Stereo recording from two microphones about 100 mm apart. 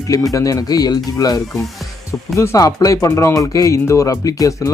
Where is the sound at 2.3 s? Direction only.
30° left (ahead or behind).